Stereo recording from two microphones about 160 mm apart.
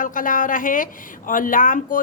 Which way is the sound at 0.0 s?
55° left (ahead or behind).